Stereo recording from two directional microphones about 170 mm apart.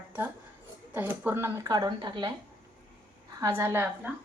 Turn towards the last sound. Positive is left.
turn(degrees=-10)  # may be behind; listen again after turning